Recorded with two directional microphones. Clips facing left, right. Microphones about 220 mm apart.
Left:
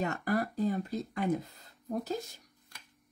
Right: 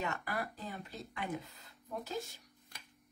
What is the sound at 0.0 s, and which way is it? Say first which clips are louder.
Speech: left 8 dB; 40° left (ahead or behind).